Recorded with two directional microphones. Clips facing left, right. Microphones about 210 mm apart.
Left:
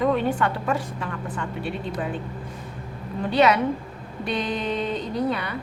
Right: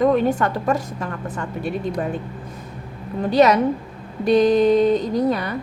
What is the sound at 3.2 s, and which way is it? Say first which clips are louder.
A woman's voice: right 4 dB; 40° right (ahead or behind).